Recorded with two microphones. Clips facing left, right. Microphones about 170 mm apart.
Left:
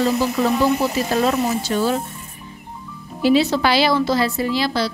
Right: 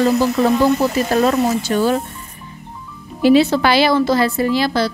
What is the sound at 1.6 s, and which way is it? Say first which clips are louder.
Speech: right 3 dB; 55° right (ahead or behind).